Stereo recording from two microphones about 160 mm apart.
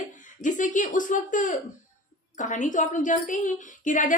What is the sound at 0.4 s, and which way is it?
A woman's voice, 55° left (ahead or behind).